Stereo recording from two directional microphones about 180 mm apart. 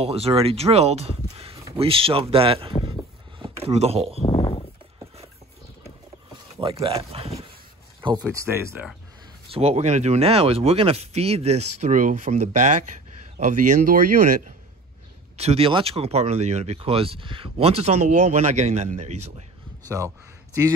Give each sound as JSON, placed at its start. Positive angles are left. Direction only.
{"t": 0.0, "sound": "speech", "side_deg": -35}
{"t": 1.3, "sound": "a sound", "side_deg": -35}
{"t": 1.8, "sound": "speech", "side_deg": -30}
{"t": 3.3, "sound": "a sound", "side_deg": -30}
{"t": 4.2, "sound": "a sound", "side_deg": 30}
{"t": 6.6, "sound": "speech", "side_deg": -30}
{"t": 8.3, "sound": "speech", "side_deg": -15}
{"t": 9.5, "sound": "speech", "side_deg": -35}
{"t": 15.3, "sound": "speech", "side_deg": -35}